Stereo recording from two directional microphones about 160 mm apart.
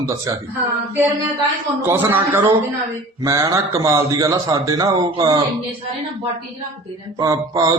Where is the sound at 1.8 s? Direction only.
10° right (ahead or behind).